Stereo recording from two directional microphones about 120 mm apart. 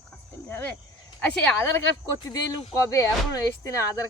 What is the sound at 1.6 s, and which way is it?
Speech, 25° left (ahead or behind).